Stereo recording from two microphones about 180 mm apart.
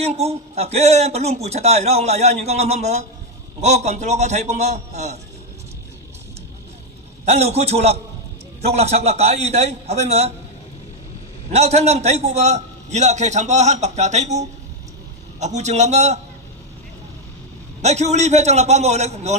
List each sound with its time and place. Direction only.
0.0 s a man's voice: 35° right (ahead or behind)
7.3 s a man's voice: 35° right (ahead or behind)
11.5 s a man's voice: 35° right (ahead or behind)
17.8 s a man's voice: 40° right (ahead or behind)